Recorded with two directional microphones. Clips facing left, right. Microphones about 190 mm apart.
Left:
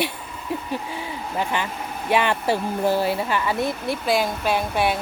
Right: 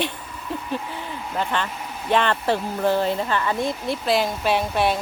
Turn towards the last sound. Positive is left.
turn(degrees=0)  # may be behind; listen again after turning